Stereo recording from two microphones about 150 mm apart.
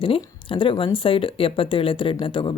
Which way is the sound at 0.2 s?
35° left (ahead or behind).